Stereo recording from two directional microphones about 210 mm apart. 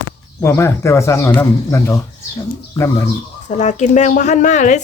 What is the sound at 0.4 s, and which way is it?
Speech, 10° left (ahead or behind).